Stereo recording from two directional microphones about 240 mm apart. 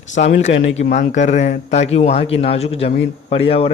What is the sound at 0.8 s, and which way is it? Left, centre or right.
A man's voice, left.